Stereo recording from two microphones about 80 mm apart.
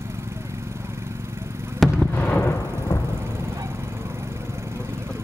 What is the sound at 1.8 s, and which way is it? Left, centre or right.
Fireworks, centre.